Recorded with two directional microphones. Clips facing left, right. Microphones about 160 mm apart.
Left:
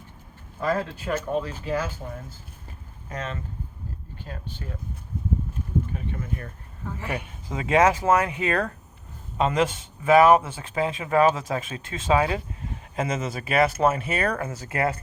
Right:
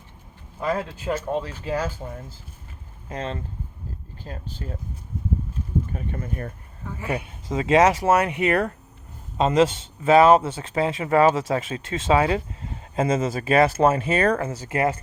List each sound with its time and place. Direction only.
0.6 s a man's voice: 15° right (ahead or behind)
1.6 s speech: 35° right (ahead or behind)
3.1 s speech: 30° right (ahead or behind)
5.9 s speech: 45° right (ahead or behind)
7.5 s speech: 25° right (ahead or behind)
14.7 s speech: 20° right (ahead or behind)